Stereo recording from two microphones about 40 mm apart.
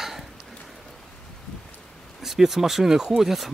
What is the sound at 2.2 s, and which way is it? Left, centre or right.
Speech, centre.